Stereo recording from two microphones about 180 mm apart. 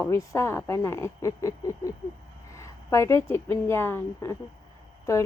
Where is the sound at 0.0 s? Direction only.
15° left (ahead or behind).